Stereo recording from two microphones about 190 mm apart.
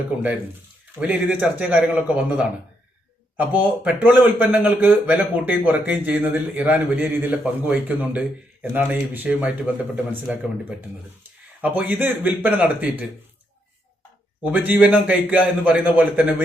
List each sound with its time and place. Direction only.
0.9 s a man's voice: 5° right (ahead or behind)
11.6 s a man's voice: 10° right (ahead or behind)
14.4 s a man's voice: 10° right (ahead or behind)